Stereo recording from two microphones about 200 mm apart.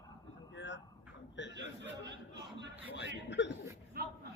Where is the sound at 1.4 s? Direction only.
65° left (ahead or behind).